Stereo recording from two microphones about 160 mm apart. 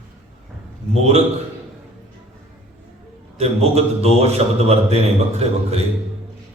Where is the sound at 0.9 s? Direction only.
40° right (ahead or behind).